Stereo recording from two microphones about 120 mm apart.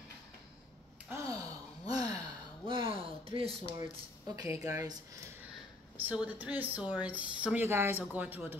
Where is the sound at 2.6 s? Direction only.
45° right (ahead or behind).